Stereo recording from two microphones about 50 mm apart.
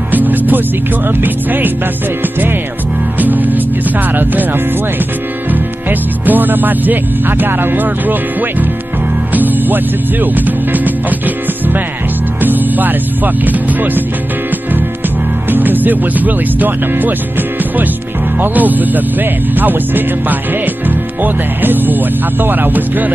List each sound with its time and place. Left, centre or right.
0.1 s music: right
1.0 s speech: right
3.2 s music: right
4.1 s speech: right
5.5 s speech: right
9.3 s music: right
10.2 s speech: right
15.5 s music: right
18.4 s speech: right